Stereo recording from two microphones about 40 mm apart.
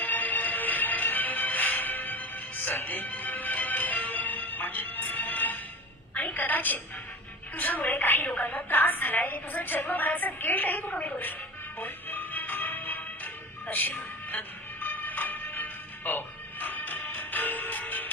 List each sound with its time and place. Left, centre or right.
0.0 s music: left
6.1 s a woman's voice: left
11.8 s music: left